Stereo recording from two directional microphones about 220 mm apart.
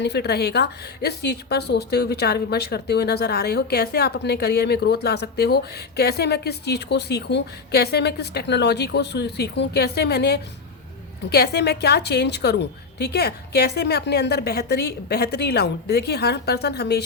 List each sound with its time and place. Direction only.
0.0 s a woman's voice: 50° left (ahead or behind)